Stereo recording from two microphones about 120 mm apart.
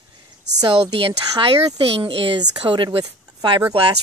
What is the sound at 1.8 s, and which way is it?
Speech, 50° right (ahead or behind).